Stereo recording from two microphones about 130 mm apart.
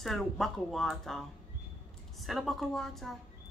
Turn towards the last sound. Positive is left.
turn(degrees=0)  # may be behind; listen again after turning